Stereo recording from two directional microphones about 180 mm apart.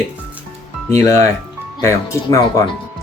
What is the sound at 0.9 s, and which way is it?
Speech, 15° left (ahead or behind).